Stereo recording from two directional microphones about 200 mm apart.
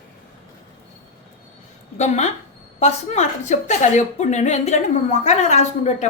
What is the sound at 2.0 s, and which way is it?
A woman's voice, 35° left (ahead or behind).